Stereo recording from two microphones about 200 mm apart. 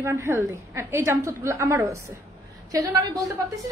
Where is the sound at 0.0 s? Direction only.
10° right (ahead or behind).